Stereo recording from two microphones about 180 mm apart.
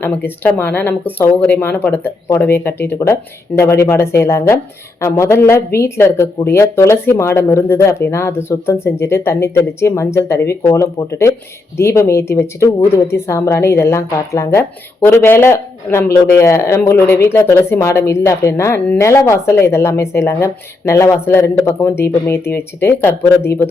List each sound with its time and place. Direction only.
0.0 s speech: 10° left (ahead or behind)